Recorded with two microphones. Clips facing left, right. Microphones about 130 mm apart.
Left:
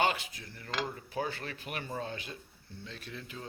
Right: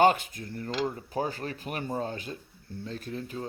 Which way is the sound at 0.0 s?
45° right (ahead or behind).